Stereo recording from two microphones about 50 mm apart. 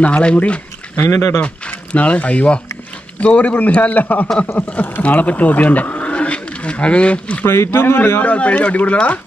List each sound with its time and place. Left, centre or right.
0.0 s speech: left
1.1 s speech: left
1.9 s a man's voice: left
7.4 s a man's voice: left
8.2 s speech: left